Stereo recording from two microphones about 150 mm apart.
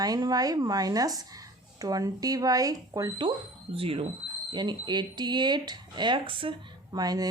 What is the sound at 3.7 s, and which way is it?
Speech, 40° right (ahead or behind).